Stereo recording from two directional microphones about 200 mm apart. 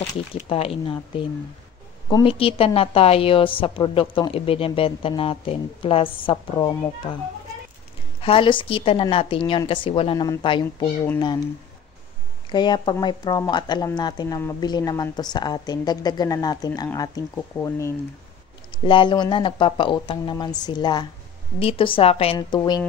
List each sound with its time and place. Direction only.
0.0 s speech: 30° left (ahead or behind)
8.2 s speech: 25° left (ahead or behind)
12.4 s speech: 20° left (ahead or behind)